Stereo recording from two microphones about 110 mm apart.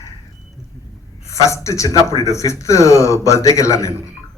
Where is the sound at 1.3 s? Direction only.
30° left (ahead or behind).